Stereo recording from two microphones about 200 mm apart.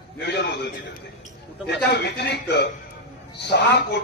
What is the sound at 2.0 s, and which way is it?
Speech, 55° left (ahead or behind).